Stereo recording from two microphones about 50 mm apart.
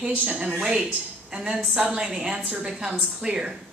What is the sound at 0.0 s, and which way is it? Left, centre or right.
A woman's voice, right.